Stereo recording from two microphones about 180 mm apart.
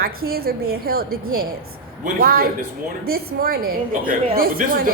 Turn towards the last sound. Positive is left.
turn(degrees=-55)  # may be behind; listen again after turning